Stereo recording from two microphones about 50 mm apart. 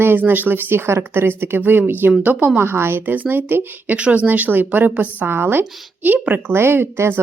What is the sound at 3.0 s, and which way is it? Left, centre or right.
Speech, right.